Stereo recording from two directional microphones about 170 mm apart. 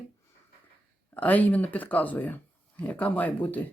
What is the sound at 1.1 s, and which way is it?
Speech, 10° left (ahead or behind).